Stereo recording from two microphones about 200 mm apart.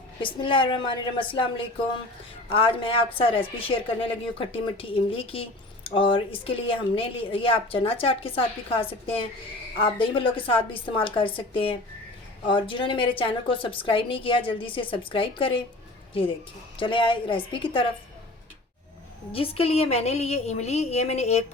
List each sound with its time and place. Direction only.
0.2 s a woman's voice: 25° left (ahead or behind)
16.7 s a woman's voice: 25° left (ahead or behind)
19.3 s a woman's voice: 30° left (ahead or behind)